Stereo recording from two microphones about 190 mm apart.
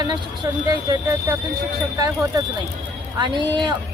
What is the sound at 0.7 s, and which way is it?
Speech, 20° right (ahead or behind).